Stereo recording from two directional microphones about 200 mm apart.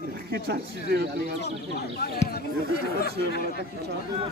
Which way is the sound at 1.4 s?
50° left (ahead or behind).